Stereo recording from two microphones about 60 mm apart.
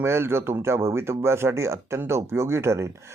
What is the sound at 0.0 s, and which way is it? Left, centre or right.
Speech, right.